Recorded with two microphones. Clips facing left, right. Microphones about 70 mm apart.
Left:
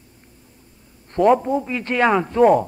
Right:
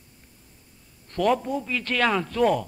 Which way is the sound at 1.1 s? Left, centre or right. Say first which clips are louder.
Left 7 dB; left.